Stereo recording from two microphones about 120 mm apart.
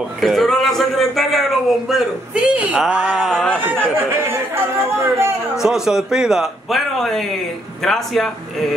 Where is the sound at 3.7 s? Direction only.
20° right (ahead or behind).